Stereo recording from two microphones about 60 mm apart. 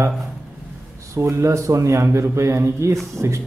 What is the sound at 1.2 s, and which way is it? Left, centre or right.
Speech, right.